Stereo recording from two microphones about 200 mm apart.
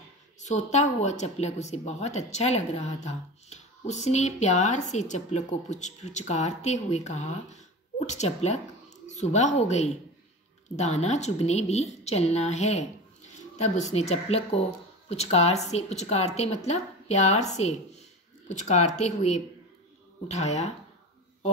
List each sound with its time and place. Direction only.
0.5 s speech: 35° left (ahead or behind)